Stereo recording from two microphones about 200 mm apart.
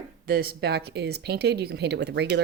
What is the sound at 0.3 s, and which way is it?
A woman's voice, 50° right (ahead or behind).